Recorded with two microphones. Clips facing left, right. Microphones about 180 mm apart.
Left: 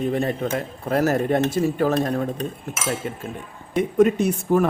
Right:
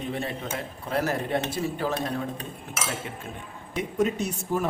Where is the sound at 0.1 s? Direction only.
45° left (ahead or behind).